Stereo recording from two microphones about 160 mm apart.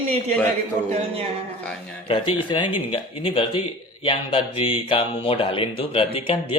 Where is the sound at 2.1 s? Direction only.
35° left (ahead or behind).